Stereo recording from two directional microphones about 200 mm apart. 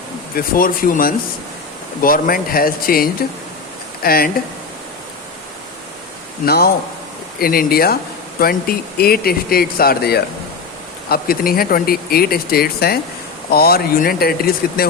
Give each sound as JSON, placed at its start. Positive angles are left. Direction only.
{"t": 0.3, "sound": "speech", "side_deg": 45}
{"t": 6.4, "sound": "speech", "side_deg": 50}